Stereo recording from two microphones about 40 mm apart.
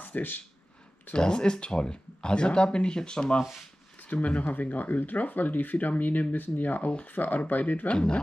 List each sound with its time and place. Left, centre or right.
0.0 s a sound: left
1.1 s speech: left
4.0 s speech: left
7.9 s speech: left